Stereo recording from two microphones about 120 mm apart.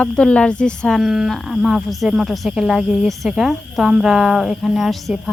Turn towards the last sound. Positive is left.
turn(degrees=0)  # may be behind; listen again after turning